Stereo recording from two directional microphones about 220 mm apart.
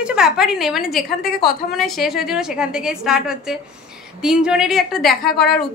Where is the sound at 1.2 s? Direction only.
45° left (ahead or behind).